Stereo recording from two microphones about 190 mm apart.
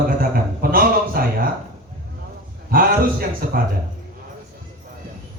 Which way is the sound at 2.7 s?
50° right (ahead or behind).